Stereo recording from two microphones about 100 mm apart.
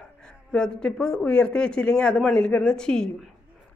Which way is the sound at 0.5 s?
10° left (ahead or behind).